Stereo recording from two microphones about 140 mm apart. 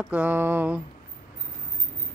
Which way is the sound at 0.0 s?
10° right (ahead or behind).